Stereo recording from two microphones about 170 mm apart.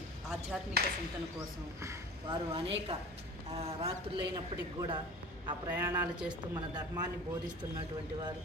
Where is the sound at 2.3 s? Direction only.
30° right (ahead or behind).